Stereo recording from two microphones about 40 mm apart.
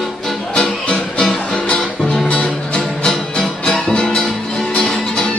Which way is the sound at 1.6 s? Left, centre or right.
Centre.